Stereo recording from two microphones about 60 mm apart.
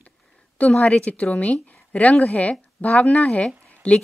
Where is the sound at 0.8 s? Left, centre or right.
Left.